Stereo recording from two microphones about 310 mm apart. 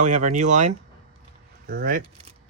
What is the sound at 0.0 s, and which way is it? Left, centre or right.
Speech, right.